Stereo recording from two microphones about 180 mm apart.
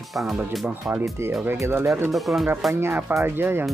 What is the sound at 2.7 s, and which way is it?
Speech, 15° right (ahead or behind).